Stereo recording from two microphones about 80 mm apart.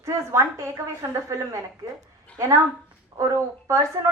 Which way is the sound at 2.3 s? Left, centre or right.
Centre.